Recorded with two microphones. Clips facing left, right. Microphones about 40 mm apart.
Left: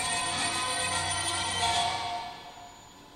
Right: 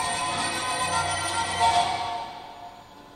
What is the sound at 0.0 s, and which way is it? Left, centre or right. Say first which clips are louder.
Music: right 4 dB; right.